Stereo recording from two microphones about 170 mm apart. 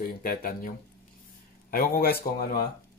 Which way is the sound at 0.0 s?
60° left (ahead or behind).